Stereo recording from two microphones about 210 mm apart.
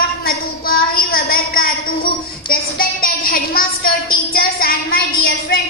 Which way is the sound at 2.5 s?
45° left (ahead or behind).